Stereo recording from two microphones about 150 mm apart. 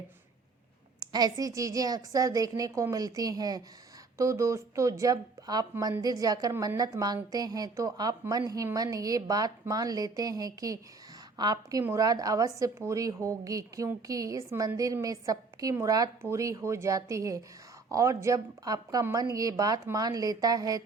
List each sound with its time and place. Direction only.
0.9 s a woman's voice: 25° right (ahead or behind)